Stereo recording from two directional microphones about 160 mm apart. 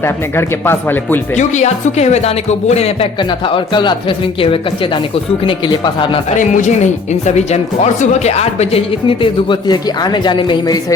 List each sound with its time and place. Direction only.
0.0 s speech: 15° left (ahead or behind)
1.4 s speech: 45° left (ahead or behind); by 6.1 s 30° left (ahead or behind)
6.3 s speech: 50° left (ahead or behind); by 10.9 s 25° left (ahead or behind)